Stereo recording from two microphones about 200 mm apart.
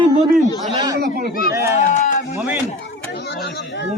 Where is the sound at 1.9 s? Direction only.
35° left (ahead or behind).